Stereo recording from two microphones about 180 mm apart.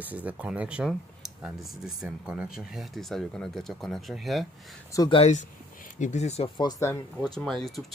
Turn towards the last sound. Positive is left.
turn(degrees=0)  # may be behind; listen again after turning